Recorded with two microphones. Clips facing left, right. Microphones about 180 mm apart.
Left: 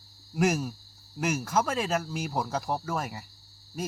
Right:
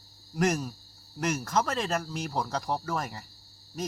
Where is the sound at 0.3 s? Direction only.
5° left (ahead or behind).